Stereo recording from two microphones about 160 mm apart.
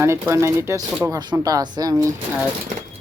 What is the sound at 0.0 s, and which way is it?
Speech, 15° right (ahead or behind).